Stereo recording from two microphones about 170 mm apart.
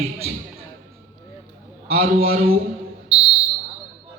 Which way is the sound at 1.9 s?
60° right (ahead or behind).